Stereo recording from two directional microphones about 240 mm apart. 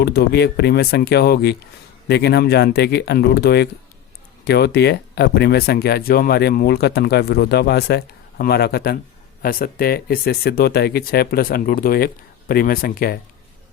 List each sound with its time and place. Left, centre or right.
0.0 s speech: left